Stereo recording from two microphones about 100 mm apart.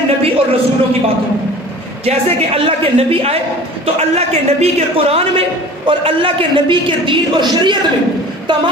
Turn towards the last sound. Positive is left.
turn(degrees=-55)  # may be behind; listen again after turning